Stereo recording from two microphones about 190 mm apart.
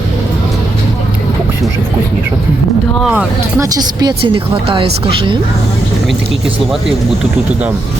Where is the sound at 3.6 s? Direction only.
20° right (ahead or behind).